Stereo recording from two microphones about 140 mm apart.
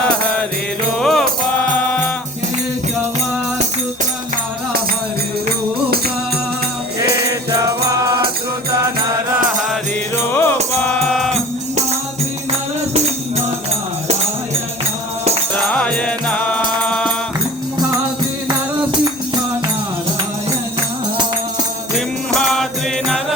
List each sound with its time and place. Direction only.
0.9 s music: 5° left (ahead or behind)
7.3 s music: 25° right (ahead or behind)
10.3 s music: 15° left (ahead or behind)
15.5 s music: 10° left (ahead or behind)
22.4 s music: 5° left (ahead or behind)